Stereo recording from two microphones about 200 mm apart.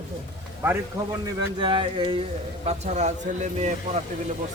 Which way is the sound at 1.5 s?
25° right (ahead or behind).